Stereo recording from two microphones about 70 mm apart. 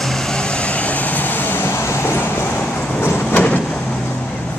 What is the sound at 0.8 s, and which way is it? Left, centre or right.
Vehicle, left.